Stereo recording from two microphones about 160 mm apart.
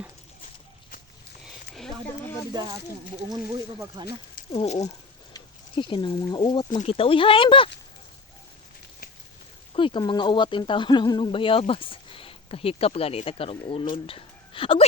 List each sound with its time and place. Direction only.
1.7 s a sound: 5° left (ahead or behind)
2.5 s speech: 25° right (ahead or behind)
4.0 s speech: 25° right (ahead or behind)
4.5 s speech: 40° left (ahead or behind)
5.3 s speech: 30° left (ahead or behind)
9.7 s speech: 30° left (ahead or behind)